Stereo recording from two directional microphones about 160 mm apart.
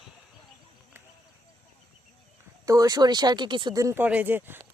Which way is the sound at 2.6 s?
25° right (ahead or behind).